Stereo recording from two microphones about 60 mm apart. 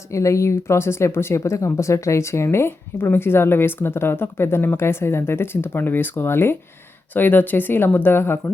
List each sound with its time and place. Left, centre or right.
0.1 s speech: left